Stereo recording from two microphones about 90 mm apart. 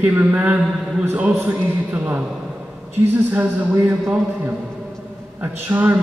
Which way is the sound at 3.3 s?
30° right (ahead or behind).